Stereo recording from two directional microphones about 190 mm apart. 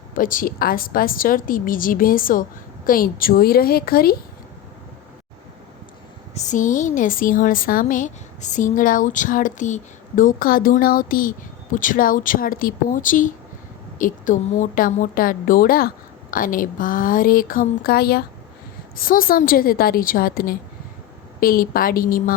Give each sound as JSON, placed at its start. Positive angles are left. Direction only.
{"t": 0.1, "sound": "a woman's voice", "side_deg": 45}
{"t": 6.3, "sound": "a woman's voice", "side_deg": 40}